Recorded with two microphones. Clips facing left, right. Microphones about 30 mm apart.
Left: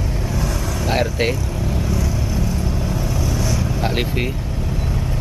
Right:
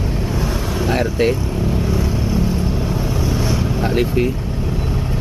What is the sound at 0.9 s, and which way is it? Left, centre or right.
Speech, centre.